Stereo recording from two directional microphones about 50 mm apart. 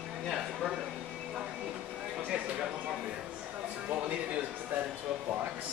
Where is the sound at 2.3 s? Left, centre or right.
Right.